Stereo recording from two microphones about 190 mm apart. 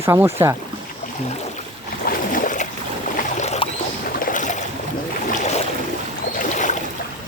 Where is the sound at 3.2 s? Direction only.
40° left (ahead or behind).